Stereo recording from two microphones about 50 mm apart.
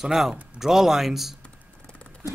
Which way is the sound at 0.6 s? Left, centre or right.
Centre.